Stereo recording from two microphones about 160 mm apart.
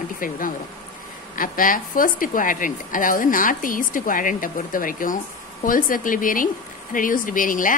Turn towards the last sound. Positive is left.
turn(degrees=55)  # may be behind; listen again after turning